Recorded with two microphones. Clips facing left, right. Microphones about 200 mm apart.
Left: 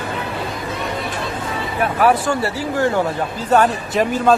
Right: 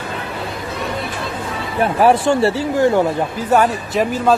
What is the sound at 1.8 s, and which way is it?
Speech, 25° right (ahead or behind).